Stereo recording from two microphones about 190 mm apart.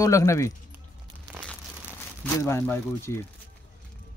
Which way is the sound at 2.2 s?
10° left (ahead or behind).